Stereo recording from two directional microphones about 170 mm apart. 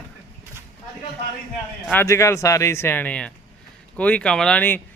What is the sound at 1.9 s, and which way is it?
Speech, 15° left (ahead or behind).